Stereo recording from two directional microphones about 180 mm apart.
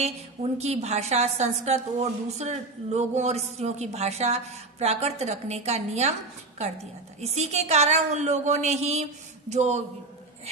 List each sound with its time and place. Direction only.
0.0 s a woman's voice: 35° right (ahead or behind)
7.2 s a woman's voice: 35° right (ahead or behind)